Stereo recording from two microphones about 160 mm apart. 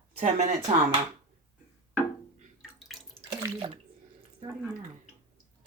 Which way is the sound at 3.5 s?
35° right (ahead or behind).